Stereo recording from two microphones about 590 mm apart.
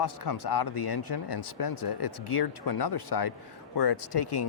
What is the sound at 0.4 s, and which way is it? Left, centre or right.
Speech, left.